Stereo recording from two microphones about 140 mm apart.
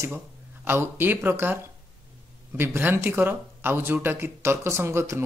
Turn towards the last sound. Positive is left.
turn(degrees=-20)  # may be behind; listen again after turning